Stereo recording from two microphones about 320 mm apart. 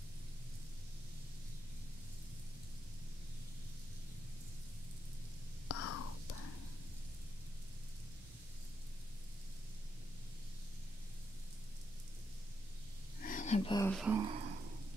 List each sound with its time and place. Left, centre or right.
5.7 s whispering: left
13.2 s a sound: left
13.9 s speech: centre
14.2 s speech: centre